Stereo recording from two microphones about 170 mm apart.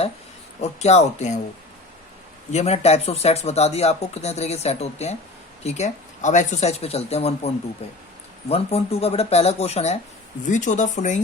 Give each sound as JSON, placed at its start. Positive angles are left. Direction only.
{"t": 0.6, "sound": "speech", "side_deg": 40}
{"t": 2.5, "sound": "speech", "side_deg": 40}